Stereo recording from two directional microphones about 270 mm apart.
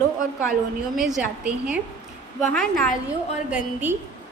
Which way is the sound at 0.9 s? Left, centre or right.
Centre.